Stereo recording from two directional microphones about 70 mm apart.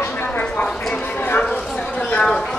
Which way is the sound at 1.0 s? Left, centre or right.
Left.